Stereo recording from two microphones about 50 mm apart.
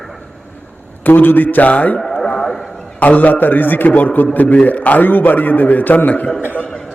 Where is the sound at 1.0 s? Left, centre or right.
Left.